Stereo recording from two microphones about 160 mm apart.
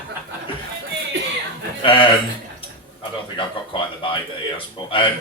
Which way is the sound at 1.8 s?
30° left (ahead or behind).